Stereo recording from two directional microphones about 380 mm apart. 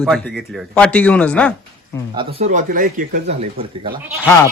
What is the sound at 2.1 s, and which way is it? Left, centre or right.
Speech, centre.